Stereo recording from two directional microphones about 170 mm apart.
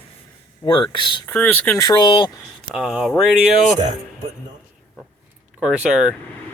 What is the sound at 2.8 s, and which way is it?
Speech, centre (ahead or behind).